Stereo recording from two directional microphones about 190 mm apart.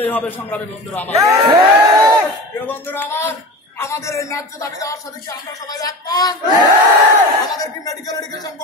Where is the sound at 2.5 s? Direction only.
10° left (ahead or behind).